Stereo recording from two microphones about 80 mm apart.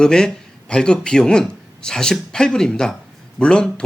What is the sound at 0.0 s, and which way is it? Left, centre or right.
Speech, centre.